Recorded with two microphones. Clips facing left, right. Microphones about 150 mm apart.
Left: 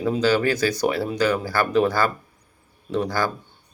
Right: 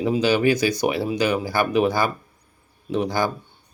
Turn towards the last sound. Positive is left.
turn(degrees=-15)  # may be behind; listen again after turning